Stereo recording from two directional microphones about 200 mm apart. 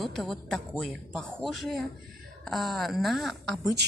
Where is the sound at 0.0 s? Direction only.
Centre (ahead or behind).